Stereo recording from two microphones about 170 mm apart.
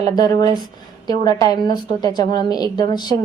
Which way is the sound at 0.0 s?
25° left (ahead or behind).